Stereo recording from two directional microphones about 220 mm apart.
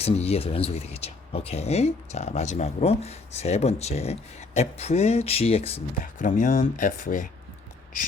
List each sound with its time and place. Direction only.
0.0 s speech: 30° left (ahead or behind)